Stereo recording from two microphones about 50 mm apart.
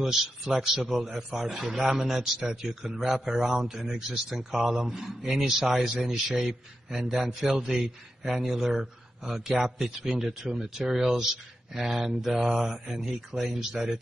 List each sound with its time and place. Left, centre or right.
0.0 s a man's voice: centre